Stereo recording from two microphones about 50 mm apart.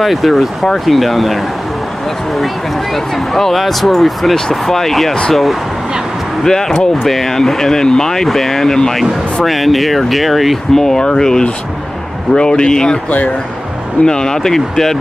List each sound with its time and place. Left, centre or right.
0.0 s speech: centre
10.8 s speech: centre
14.0 s speech: centre